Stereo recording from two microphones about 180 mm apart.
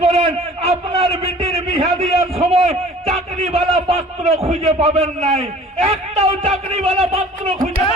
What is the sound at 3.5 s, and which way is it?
A man's voice, 35° right (ahead or behind).